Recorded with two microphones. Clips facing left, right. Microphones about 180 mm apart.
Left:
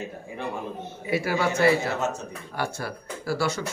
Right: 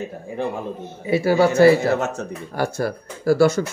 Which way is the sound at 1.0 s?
30° right (ahead or behind).